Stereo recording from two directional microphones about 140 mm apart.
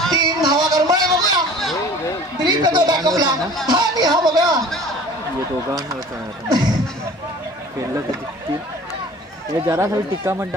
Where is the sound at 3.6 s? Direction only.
30° right (ahead or behind).